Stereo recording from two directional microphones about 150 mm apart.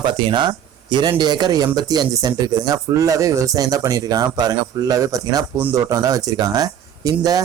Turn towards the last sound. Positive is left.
turn(degrees=-25)  # may be behind; listen again after turning